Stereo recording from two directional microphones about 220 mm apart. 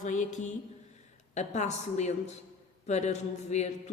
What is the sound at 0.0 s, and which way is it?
Speech, 35° left (ahead or behind).